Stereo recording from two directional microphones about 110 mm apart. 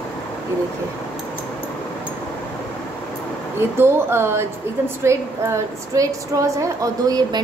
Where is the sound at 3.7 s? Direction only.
20° right (ahead or behind).